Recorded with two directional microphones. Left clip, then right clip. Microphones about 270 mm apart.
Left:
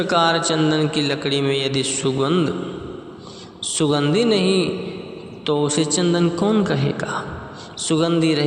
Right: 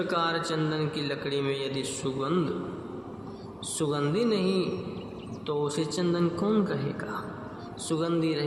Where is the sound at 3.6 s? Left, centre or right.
Left.